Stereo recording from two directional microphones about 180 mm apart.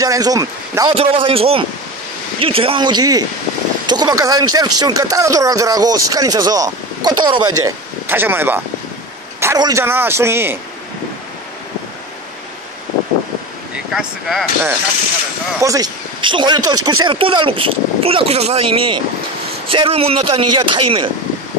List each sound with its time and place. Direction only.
0.0 s speech: 20° right (ahead or behind)
0.9 s a man's voice: 30° right (ahead or behind)
8.1 s a man's voice: 10° right (ahead or behind)
13.9 s a man's voice: 5° right (ahead or behind)
15.6 s speech: 20° right (ahead or behind)